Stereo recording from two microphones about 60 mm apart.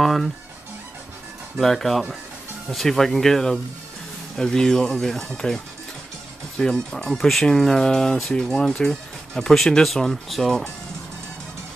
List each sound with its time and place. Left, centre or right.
0.0 s music: centre
1.6 s speech: centre
6.6 s speech: centre